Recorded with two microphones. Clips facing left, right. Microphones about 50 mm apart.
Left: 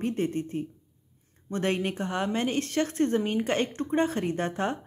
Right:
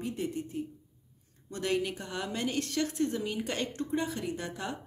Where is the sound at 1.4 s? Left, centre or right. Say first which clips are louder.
Left 3 dB; left.